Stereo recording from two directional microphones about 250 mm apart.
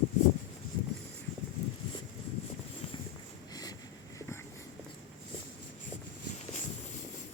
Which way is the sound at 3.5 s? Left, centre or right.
Centre.